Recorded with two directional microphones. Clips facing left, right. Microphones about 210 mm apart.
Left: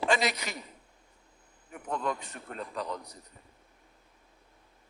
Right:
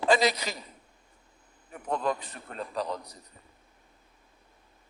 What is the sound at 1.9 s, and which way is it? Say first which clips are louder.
A man's voice: right 3 dB; 35° right (ahead or behind).